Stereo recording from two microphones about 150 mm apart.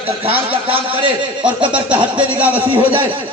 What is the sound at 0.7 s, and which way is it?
A man's voice, 30° right (ahead or behind).